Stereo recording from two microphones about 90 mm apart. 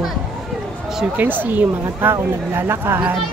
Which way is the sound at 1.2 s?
20° right (ahead or behind).